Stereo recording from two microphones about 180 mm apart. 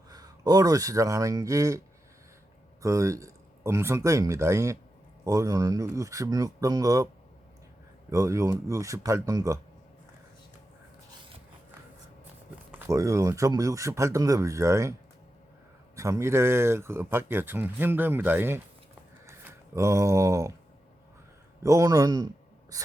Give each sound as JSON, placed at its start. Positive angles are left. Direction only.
{"t": 0.1, "sound": "speech", "side_deg": -20}
{"t": 2.8, "sound": "speech", "side_deg": -15}
{"t": 8.1, "sound": "speech", "side_deg": -15}
{"t": 12.9, "sound": "speech", "side_deg": -15}
{"t": 16.0, "sound": "speech", "side_deg": -15}
{"t": 19.2, "sound": "a sound", "side_deg": -15}
{"t": 21.6, "sound": "speech", "side_deg": -15}